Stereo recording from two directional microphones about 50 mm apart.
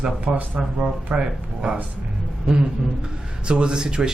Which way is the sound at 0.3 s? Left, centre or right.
Right.